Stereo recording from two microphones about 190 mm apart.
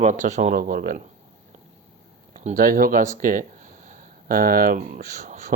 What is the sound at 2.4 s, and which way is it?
Speech, 45° right (ahead or behind).